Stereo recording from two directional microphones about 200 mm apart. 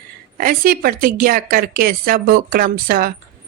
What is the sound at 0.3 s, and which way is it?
Speech, 45° right (ahead or behind).